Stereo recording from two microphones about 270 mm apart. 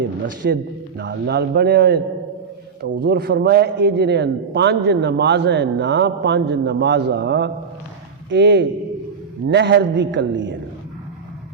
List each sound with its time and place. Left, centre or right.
0.4 s a man's voice: right